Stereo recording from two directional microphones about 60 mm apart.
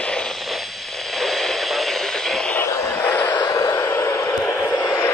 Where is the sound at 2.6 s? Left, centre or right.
Left.